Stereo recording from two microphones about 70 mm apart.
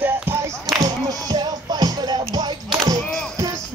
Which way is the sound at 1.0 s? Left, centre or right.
Right.